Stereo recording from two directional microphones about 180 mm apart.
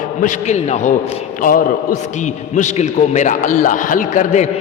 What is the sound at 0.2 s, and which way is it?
A man's voice, 40° left (ahead or behind).